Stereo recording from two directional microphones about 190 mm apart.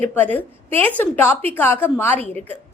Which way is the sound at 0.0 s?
10° left (ahead or behind).